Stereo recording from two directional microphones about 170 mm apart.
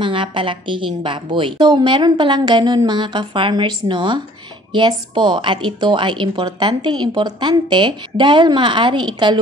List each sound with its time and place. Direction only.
0.0 s a woman's voice: 30° right (ahead or behind)